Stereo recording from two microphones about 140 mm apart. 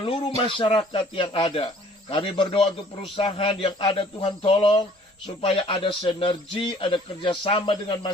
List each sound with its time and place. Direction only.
0.0 s speech: 40° left (ahead or behind)